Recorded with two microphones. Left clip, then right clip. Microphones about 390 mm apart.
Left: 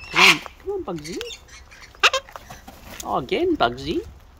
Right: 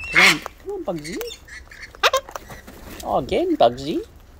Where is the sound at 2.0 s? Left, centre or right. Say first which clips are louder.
Even; centre.